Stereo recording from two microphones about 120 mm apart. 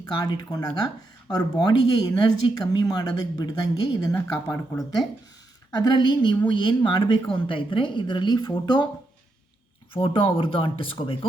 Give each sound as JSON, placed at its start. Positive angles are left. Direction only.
{"t": 0.0, "sound": "speech", "side_deg": 35}
{"t": 5.7, "sound": "speech", "side_deg": 35}
{"t": 9.9, "sound": "speech", "side_deg": 45}